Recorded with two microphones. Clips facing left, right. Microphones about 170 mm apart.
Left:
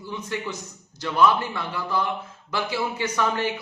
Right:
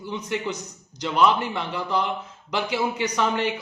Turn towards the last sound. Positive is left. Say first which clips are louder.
# right 1 dB
turn(degrees=-20)  # may be behind; listen again after turning